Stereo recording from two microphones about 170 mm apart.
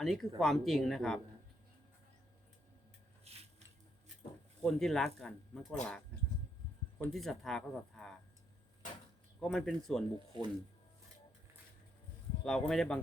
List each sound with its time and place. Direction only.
0.0 s speech: centre (ahead or behind)
4.6 s speech: centre (ahead or behind)
7.1 s speech: centre (ahead or behind)
9.4 s speech: 5° left (ahead or behind)
10.3 s speech: 30° right (ahead or behind)
12.5 s speech: 5° left (ahead or behind)